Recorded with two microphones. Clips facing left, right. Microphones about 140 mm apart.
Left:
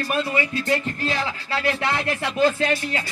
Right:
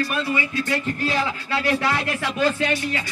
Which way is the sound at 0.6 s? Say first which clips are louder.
Left 1 dB; 30° left (ahead or behind).